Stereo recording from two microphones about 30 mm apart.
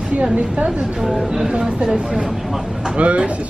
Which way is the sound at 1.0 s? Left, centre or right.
Centre.